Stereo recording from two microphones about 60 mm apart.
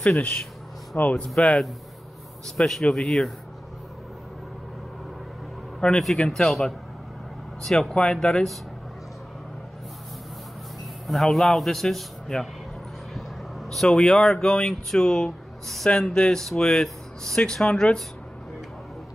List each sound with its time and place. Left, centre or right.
0.9 s speech: left
1.2 s a man's voice: centre
5.8 s a man's voice: centre
6.4 s a man's voice: centre
7.9 s speech: centre
11.1 s a man's voice: centre
13.1 s a sound: centre
13.8 s speech: centre